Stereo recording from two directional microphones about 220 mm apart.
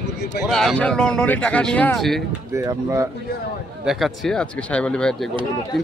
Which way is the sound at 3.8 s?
Centre (ahead or behind).